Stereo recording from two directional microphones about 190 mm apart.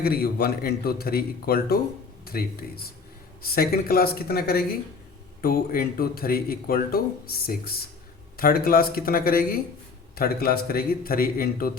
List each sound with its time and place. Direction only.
0.0 s a man's voice: 55° left (ahead or behind)